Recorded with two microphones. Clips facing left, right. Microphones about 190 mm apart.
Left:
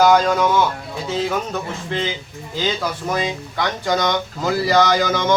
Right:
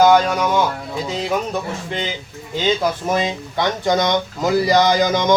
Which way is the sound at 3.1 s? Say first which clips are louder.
Right 2 dB; 20° right (ahead or behind).